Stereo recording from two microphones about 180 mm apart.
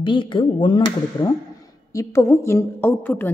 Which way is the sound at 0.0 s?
25° left (ahead or behind).